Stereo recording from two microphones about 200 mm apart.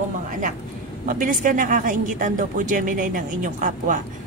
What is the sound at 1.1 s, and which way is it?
A woman's voice, 40° right (ahead or behind).